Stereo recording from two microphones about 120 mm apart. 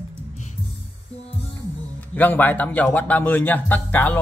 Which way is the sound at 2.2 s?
15° left (ahead or behind).